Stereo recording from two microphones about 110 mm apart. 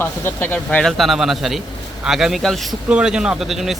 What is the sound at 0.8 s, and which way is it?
Speech, centre (ahead or behind).